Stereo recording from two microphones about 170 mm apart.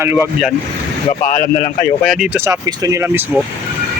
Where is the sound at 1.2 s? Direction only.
50° left (ahead or behind).